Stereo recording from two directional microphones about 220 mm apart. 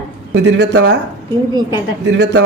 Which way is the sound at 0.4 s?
50° right (ahead or behind).